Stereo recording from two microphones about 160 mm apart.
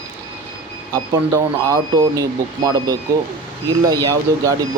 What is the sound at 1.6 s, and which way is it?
Speech, 20° right (ahead or behind).